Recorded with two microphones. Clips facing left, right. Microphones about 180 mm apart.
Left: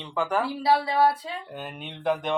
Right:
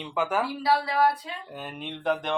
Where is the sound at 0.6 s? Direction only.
25° left (ahead or behind).